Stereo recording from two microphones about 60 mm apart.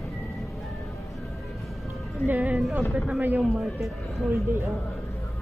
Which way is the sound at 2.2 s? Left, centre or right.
Right.